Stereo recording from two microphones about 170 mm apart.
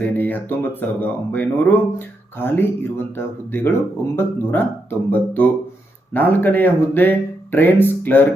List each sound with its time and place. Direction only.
0.0 s speech: 10° left (ahead or behind)